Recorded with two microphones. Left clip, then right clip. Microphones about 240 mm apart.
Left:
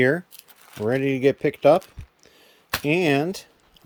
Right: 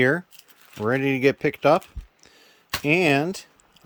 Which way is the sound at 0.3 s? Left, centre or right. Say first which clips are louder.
Left 1 dB; centre.